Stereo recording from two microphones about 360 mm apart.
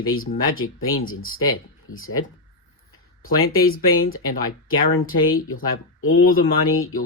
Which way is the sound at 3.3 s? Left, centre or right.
Left.